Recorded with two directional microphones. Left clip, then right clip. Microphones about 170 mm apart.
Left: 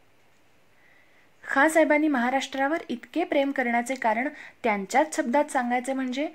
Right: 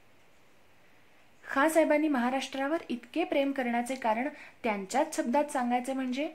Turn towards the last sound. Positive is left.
turn(degrees=30)  # may be behind; listen again after turning